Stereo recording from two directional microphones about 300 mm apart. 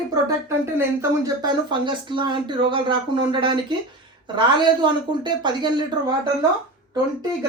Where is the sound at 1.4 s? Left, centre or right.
Centre.